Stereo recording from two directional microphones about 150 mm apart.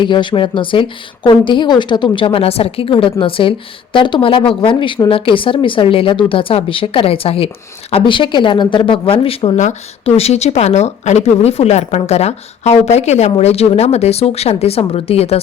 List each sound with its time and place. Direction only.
0.0 s speech: 30° left (ahead or behind)